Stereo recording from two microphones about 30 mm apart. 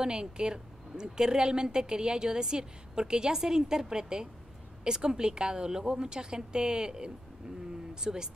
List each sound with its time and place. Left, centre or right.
0.0 s a woman's voice: right